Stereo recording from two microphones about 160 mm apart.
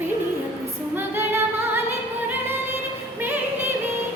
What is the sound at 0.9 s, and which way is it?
Music, 15° right (ahead or behind).